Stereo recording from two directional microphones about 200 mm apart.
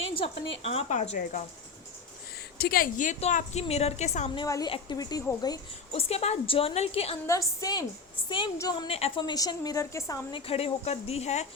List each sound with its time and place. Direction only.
0.2 s a woman's voice: 30° left (ahead or behind)
2.6 s a woman's voice: 50° left (ahead or behind)
4.4 s a woman's voice: 15° left (ahead or behind)
7.3 s a woman's voice: 15° left (ahead or behind)
8.9 s a woman's voice: 30° left (ahead or behind)
10.4 s a woman's voice: 30° left (ahead or behind)